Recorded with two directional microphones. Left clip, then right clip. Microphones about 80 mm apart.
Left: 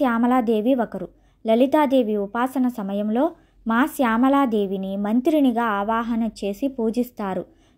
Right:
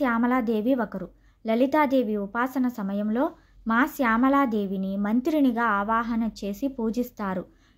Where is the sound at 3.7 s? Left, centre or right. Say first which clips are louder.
Left 2 dB; left.